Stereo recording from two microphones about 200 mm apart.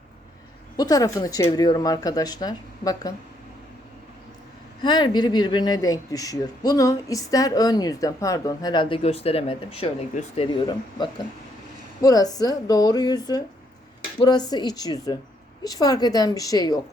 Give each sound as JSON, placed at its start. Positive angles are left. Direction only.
{"t": 0.8, "sound": "speech", "side_deg": 20}
{"t": 4.8, "sound": "speech", "side_deg": 20}